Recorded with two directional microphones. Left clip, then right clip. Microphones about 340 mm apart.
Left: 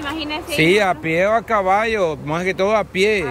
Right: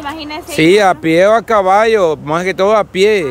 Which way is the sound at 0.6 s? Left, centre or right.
Centre.